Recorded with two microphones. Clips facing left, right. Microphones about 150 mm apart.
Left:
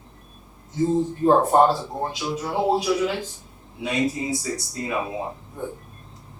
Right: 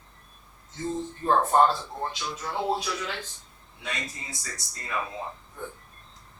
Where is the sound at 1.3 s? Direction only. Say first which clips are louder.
Left 4 dB; 15° left (ahead or behind).